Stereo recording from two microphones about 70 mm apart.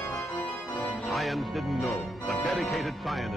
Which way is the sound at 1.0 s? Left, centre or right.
Centre.